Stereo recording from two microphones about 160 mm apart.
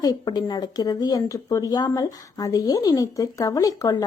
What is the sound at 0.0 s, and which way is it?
Speech, 25° left (ahead or behind).